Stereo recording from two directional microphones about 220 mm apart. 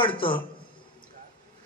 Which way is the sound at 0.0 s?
25° left (ahead or behind).